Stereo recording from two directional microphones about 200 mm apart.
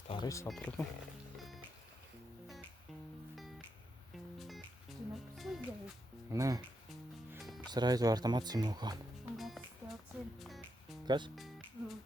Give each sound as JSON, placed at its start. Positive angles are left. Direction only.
{"t": 0.1, "sound": "speech", "side_deg": 20}
{"t": 0.4, "sound": "speech", "side_deg": 0}
{"t": 1.4, "sound": "music", "side_deg": 0}
{"t": 4.4, "sound": "music", "side_deg": 0}
{"t": 6.3, "sound": "speech", "side_deg": -15}
{"t": 7.3, "sound": "music", "side_deg": 0}
{"t": 7.7, "sound": "speech", "side_deg": -20}
{"t": 9.4, "sound": "music", "side_deg": 0}
{"t": 11.0, "sound": "speech", "side_deg": -20}
{"t": 11.3, "sound": "music", "side_deg": 0}